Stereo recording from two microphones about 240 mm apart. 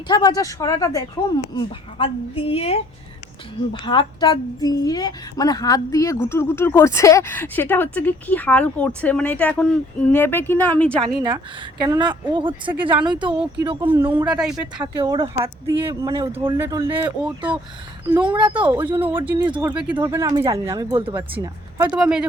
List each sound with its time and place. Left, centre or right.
0.1 s a woman's voice: centre
11.9 s speech: centre
14.3 s speech: centre
14.8 s speech: centre
18.6 s speech: centre
19.5 s speech: right
19.7 s speech: centre